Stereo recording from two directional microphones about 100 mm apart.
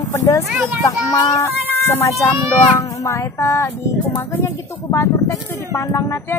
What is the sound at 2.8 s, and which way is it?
Music, 30° left (ahead or behind).